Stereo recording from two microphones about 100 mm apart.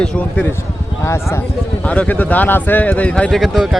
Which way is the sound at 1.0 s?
25° left (ahead or behind).